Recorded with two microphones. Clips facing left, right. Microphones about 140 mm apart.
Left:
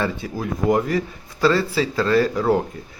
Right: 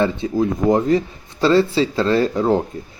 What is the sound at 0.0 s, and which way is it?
Speech, 25° right (ahead or behind).